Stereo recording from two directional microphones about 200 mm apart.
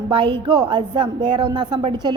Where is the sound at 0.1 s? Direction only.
25° right (ahead or behind).